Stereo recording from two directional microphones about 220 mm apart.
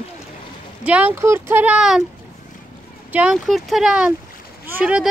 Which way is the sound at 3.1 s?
5° right (ahead or behind).